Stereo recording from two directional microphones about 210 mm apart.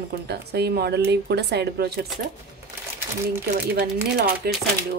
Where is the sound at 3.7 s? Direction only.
50° right (ahead or behind).